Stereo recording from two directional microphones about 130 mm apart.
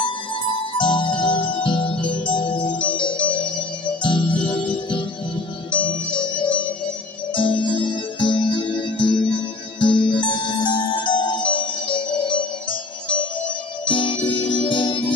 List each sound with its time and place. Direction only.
0.0 s music: 40° left (ahead or behind)
13.8 s music: 40° left (ahead or behind)